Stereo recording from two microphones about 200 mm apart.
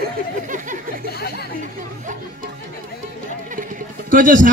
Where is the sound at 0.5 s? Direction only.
40° right (ahead or behind).